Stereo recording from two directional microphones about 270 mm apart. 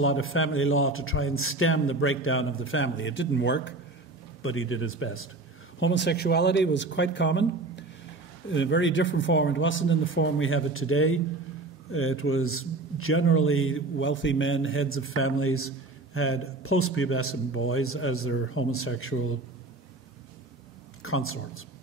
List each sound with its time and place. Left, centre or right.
0.0 s a man's voice: left
21.0 s speech: left